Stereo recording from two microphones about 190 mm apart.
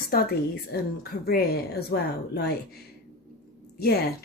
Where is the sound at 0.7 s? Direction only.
55° left (ahead or behind).